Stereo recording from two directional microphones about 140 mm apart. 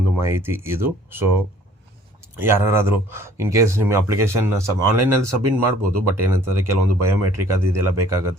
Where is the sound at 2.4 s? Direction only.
15° right (ahead or behind).